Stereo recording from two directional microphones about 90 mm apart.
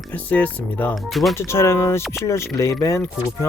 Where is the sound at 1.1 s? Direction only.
Centre (ahead or behind).